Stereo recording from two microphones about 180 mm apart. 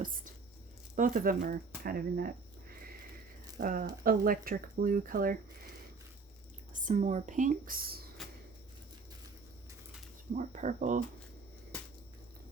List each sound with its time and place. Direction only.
0.0 s a sound: 50° right (ahead or behind)
0.9 s speech: 50° right (ahead or behind)
3.6 s speech: 50° right (ahead or behind)
6.7 s speech: 45° right (ahead or behind)
10.3 s speech: 40° right (ahead or behind)